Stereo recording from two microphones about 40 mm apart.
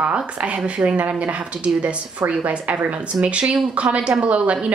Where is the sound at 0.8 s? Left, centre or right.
Right.